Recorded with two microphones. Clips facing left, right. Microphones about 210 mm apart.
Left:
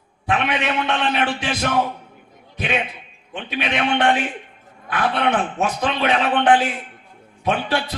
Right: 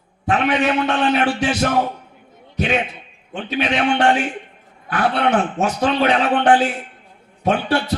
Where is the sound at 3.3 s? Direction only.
40° right (ahead or behind).